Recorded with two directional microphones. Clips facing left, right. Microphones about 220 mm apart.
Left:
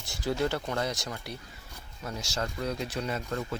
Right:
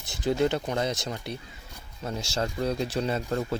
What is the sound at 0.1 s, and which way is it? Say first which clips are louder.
Speech: right 4 dB; 20° right (ahead or behind).